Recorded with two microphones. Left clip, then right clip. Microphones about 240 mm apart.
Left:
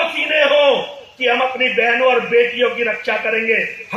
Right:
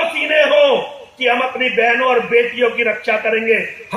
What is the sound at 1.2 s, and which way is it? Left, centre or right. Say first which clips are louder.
A man's voice: even; right.